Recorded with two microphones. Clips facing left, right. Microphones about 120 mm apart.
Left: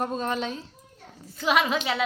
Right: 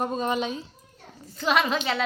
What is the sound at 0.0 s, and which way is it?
Speech, 5° right (ahead or behind).